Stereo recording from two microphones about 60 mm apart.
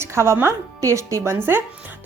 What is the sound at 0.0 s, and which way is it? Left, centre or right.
Music, right.